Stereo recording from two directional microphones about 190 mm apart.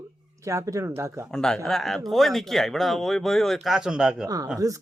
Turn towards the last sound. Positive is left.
turn(degrees=-20)  # may be behind; listen again after turning